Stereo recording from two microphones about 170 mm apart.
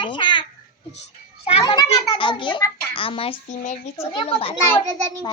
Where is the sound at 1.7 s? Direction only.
20° left (ahead or behind).